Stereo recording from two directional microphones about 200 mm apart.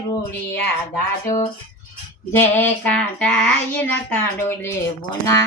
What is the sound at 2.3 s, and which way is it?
Child singing, 10° left (ahead or behind).